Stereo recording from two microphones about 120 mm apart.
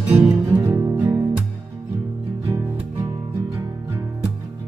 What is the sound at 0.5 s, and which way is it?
Music, 25° right (ahead or behind).